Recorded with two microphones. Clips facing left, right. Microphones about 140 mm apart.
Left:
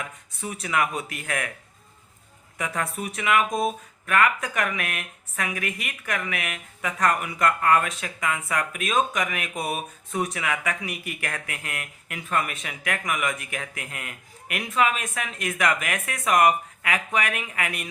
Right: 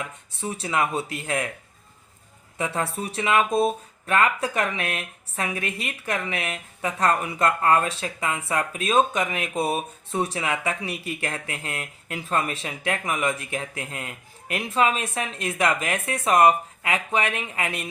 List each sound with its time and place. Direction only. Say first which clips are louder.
0.3 s speech: right 1 dB; 30° right (ahead or behind)
2.6 s speech: right 2 dB; 30° right (ahead or behind)